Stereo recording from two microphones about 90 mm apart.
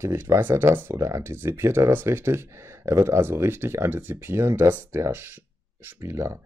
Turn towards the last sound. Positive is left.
turn(degrees=-30)  # may be behind; listen again after turning